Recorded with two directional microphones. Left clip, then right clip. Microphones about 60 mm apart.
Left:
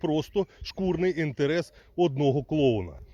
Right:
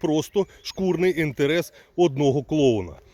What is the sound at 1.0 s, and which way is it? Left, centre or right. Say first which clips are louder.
Speech: right 5 dB; right.